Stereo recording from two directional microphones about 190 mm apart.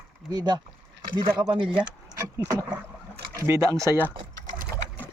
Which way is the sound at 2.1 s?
15° right (ahead or behind).